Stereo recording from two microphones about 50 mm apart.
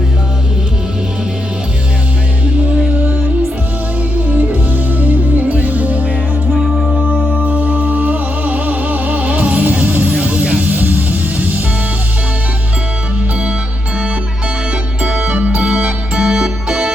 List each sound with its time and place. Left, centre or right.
4.3 s music: right
7.1 s music: right
15.0 s music: centre